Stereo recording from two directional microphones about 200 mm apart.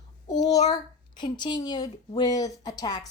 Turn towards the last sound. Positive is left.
turn(degrees=20)  # may be behind; listen again after turning